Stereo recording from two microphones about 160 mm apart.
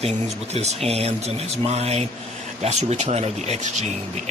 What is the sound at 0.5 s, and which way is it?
Speech, 40° right (ahead or behind).